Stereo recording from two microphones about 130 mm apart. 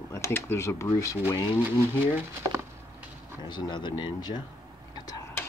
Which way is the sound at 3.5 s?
35° left (ahead or behind).